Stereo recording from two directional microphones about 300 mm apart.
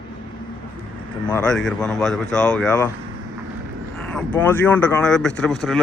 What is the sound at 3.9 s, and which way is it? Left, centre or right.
Speech, centre.